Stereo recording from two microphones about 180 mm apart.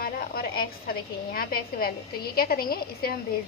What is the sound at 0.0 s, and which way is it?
Speech, 55° left (ahead or behind).